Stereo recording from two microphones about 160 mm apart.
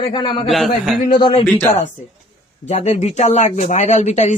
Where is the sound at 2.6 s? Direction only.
45° left (ahead or behind).